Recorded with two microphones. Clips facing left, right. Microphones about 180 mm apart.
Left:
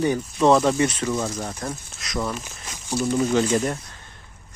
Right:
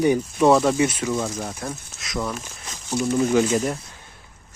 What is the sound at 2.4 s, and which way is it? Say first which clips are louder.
Crumpling: even; 10° left (ahead or behind).